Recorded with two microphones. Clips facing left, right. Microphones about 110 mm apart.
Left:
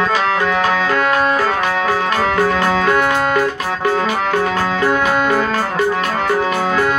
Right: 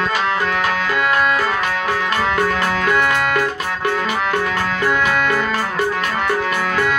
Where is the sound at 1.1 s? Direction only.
35° left (ahead or behind).